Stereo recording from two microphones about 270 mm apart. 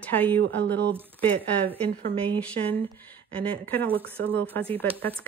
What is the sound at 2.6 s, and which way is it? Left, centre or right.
Speech, right.